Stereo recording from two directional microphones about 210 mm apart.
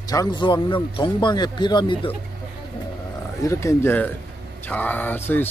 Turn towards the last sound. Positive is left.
turn(degrees=10)  # may be behind; listen again after turning